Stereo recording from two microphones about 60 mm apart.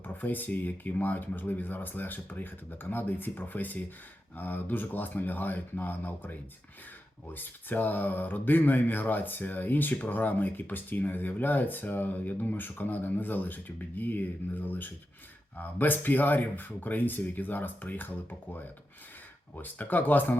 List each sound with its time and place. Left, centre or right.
0.0 s speech: left
7.3 s speech: left